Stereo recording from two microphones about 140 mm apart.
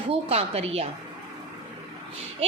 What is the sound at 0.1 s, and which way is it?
Speech, 45° right (ahead or behind).